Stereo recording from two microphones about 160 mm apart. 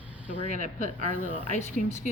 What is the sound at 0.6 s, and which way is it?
A woman's voice, 45° left (ahead or behind).